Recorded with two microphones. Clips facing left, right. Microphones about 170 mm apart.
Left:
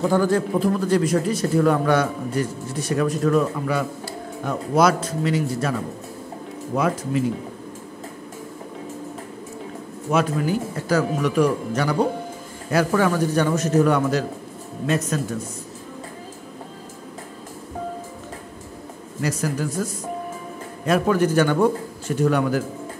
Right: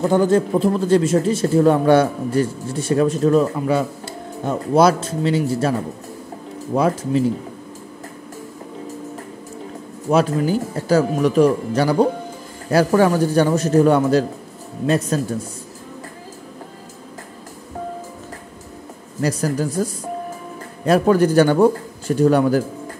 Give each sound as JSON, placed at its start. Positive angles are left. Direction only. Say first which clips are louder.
{"t": 0.1, "sound": "speech", "louder": "right 4 dB", "side_deg": -20}
{"t": 10.1, "sound": "speech", "louder": "right 4 dB", "side_deg": -30}
{"t": 19.2, "sound": "speech", "louder": "right 4 dB", "side_deg": -35}